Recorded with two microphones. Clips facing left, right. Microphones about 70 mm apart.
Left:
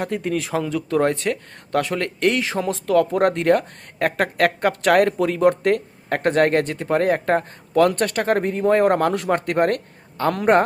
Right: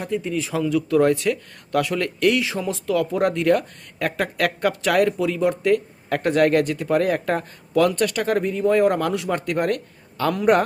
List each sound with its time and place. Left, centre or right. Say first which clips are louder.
0.0 s speech: left 1 dB; left
0.5 s speech: right 4 dB; left